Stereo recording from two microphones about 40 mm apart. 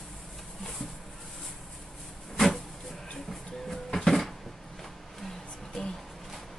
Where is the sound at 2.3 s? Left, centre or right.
Centre.